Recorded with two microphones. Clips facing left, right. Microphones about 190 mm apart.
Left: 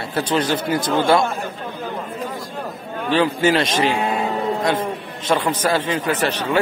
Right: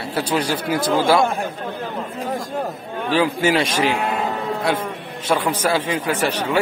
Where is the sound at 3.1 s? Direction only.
10° right (ahead or behind).